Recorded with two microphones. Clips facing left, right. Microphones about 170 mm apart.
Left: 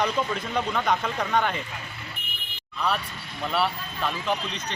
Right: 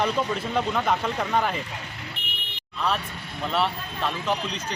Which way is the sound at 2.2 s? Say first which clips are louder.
Right 3 dB; 75° right (ahead or behind).